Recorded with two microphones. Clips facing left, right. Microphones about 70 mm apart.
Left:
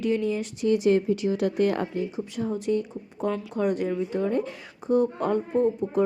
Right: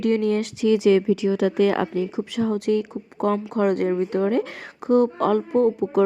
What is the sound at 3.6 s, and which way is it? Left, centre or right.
Speech, right.